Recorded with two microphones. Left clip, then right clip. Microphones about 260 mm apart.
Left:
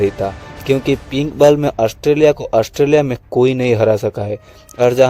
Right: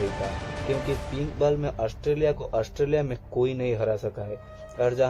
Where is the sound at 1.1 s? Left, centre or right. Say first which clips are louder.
Left 15 dB; left.